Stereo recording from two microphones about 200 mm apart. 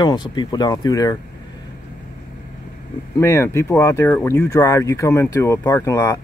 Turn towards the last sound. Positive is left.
turn(degrees=15)  # may be behind; listen again after turning